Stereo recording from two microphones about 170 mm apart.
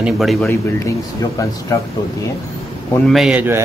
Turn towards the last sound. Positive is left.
turn(degrees=-10)  # may be behind; listen again after turning